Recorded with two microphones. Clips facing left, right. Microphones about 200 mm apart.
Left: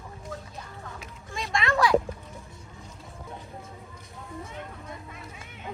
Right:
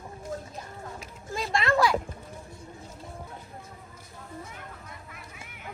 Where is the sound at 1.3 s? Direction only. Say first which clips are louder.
Right 2 dB; centre (ahead or behind).